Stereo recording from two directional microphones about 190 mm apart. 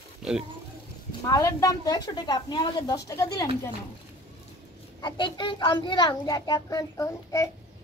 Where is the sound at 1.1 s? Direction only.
20° left (ahead or behind).